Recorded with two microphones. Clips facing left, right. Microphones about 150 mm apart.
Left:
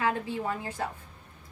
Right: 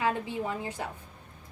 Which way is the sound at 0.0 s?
15° right (ahead or behind).